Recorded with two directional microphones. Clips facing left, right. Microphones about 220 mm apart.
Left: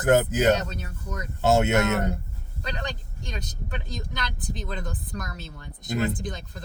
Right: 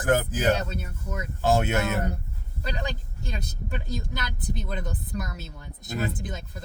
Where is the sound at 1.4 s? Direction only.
25° left (ahead or behind).